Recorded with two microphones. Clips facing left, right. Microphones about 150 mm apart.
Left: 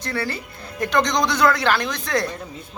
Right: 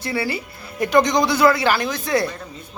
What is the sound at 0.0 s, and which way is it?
Speech, 10° right (ahead or behind).